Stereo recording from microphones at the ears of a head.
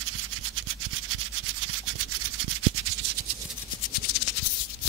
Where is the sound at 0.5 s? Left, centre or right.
Right.